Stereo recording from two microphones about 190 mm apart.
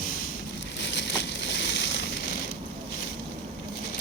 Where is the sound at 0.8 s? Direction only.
65° left (ahead or behind).